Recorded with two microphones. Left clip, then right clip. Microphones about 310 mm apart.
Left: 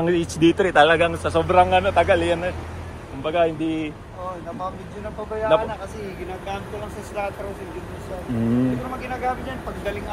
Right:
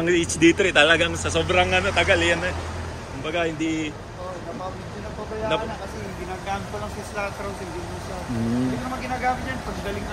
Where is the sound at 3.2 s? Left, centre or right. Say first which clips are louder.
Left 4 dB; centre.